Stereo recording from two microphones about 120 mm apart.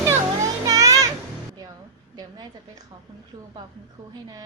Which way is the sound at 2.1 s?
35° right (ahead or behind).